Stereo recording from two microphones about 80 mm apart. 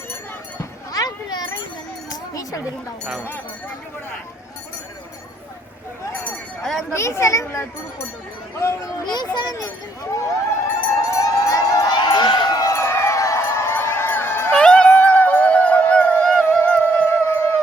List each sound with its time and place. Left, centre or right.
0.6 s a sound: left
2.0 s music: left
3.2 s speech: centre
6.6 s speech: centre
6.9 s a child's voice: left
9.0 s a child's voice: left
10.1 s a child's voice: left
11.1 s run: left
12.7 s a sound: left
14.5 s music: centre; by 17.6 s left